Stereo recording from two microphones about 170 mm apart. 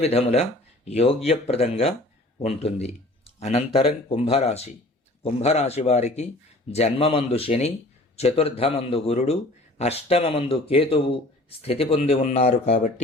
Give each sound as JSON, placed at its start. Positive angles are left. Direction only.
{"t": 0.0, "sound": "a man's voice", "side_deg": 35}